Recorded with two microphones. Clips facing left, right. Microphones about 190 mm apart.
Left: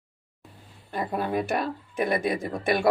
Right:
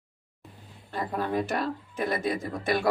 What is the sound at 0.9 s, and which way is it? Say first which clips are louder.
Speech: left 1 dB; 10° left (ahead or behind).